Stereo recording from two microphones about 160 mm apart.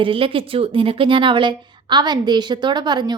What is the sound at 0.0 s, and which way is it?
A woman's voice, 35° right (ahead or behind).